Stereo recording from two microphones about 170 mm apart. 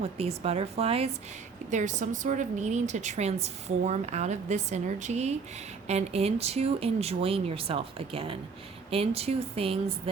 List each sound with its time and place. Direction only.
0.0 s a woman's voice: 35° right (ahead or behind)